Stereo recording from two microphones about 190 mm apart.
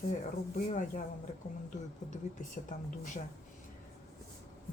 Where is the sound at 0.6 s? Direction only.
40° left (ahead or behind).